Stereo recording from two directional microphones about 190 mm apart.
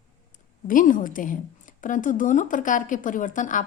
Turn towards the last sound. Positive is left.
turn(degrees=45)  # may be behind; listen again after turning